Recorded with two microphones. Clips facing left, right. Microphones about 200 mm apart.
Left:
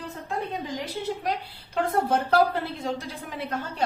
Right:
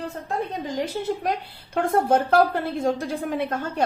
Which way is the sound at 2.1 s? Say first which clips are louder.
Right 3 dB; 50° right (ahead or behind).